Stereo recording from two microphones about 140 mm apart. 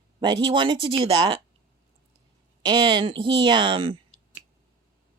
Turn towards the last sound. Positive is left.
turn(degrees=-35)  # may be behind; listen again after turning